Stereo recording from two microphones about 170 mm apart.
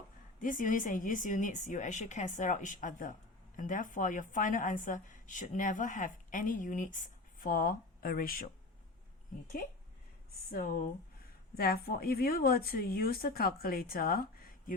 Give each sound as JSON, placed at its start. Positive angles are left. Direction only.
{"t": 0.3, "sound": "a woman's voice", "side_deg": 50}
{"t": 10.5, "sound": "a woman's voice", "side_deg": 55}